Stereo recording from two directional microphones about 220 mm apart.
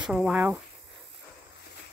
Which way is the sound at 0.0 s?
5° right (ahead or behind).